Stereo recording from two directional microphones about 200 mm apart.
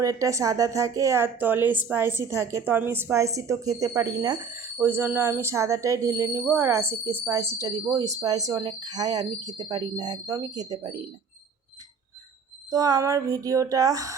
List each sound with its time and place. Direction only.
0.0 s a woman's voice: 15° right (ahead or behind)
12.7 s a woman's voice: 15° right (ahead or behind)